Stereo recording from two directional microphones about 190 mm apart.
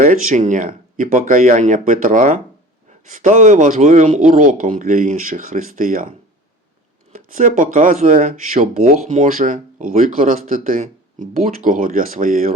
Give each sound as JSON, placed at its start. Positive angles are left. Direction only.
{"t": 0.0, "sound": "speech", "side_deg": -45}
{"t": 7.2, "sound": "speech", "side_deg": -45}